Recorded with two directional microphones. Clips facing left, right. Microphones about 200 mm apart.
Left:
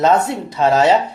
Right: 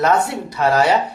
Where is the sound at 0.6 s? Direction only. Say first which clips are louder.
Left 2 dB; 25° left (ahead or behind).